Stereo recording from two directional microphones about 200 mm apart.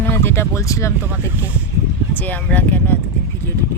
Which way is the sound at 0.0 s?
10° left (ahead or behind).